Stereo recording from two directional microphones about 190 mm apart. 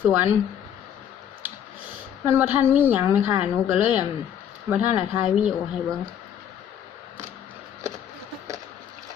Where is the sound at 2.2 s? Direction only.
10° right (ahead or behind).